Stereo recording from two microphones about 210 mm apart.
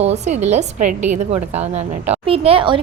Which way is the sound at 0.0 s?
30° right (ahead or behind).